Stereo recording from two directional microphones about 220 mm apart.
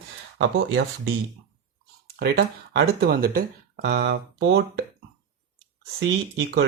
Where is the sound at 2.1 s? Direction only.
45° right (ahead or behind).